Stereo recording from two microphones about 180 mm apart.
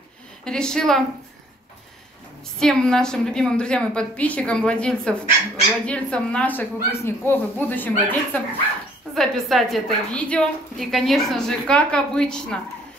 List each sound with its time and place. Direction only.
0.5 s a woman's voice: 5° left (ahead or behind)
2.6 s a woman's voice: 5° left (ahead or behind)